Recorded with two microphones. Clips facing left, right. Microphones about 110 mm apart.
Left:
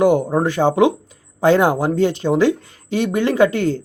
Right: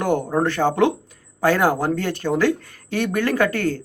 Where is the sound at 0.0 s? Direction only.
15° left (ahead or behind).